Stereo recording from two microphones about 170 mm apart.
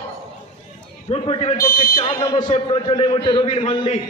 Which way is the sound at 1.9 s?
25° left (ahead or behind).